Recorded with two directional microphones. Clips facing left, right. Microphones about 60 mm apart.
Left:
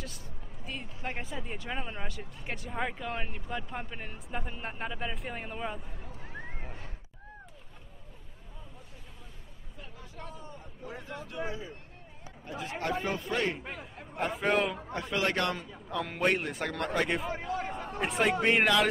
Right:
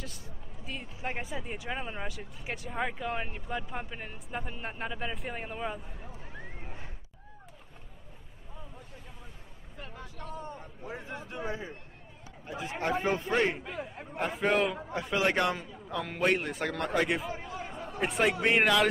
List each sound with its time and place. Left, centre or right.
0.7 s speech: centre
6.4 s horse: left
10.9 s a sound: right
12.4 s a man's voice: centre
14.1 s a man's voice: centre
15.9 s speech: centre